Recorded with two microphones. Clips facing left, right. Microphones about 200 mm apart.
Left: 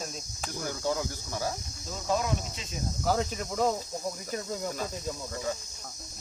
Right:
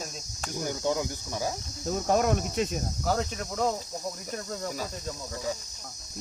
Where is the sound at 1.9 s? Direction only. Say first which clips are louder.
Right 5 dB; 55° right (ahead or behind).